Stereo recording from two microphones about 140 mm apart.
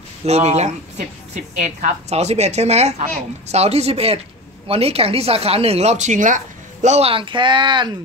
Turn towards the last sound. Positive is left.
turn(degrees=-35)  # may be behind; listen again after turning